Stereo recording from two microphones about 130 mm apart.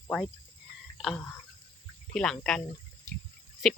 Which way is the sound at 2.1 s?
5° left (ahead or behind).